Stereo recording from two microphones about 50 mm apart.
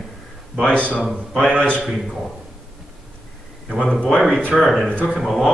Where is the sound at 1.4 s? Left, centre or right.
Left.